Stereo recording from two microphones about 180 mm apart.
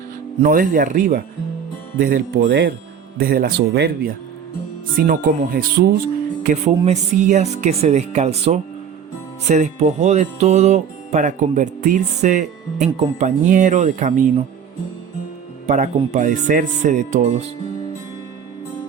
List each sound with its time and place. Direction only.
0.4 s speech: 50° right (ahead or behind)
3.2 s speech: 55° right (ahead or behind)
6.4 s music: 45° right (ahead or behind)
15.6 s music: 40° right (ahead or behind)